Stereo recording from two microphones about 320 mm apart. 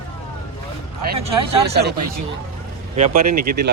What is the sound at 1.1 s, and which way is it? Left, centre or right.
Speech, centre.